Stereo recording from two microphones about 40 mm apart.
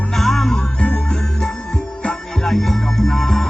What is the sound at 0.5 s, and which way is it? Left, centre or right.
Music, left.